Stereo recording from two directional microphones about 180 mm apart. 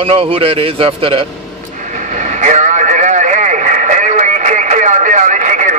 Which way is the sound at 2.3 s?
45° right (ahead or behind).